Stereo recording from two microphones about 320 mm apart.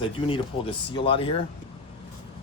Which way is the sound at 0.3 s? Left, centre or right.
Centre.